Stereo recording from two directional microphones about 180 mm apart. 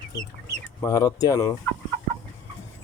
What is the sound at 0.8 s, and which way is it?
Speech, 20° left (ahead or behind).